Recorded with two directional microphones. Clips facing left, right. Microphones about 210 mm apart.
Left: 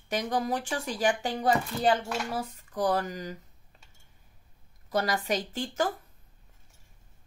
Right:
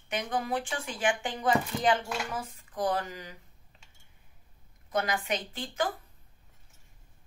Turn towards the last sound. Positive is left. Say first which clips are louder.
# left 3 dB
turn(degrees=45)  # may be behind; listen again after turning